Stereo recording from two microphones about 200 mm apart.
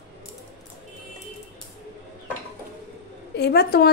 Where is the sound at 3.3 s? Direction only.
55° left (ahead or behind).